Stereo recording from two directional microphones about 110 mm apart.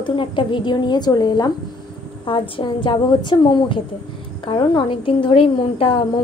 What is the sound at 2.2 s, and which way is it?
A woman's voice, 55° left (ahead or behind).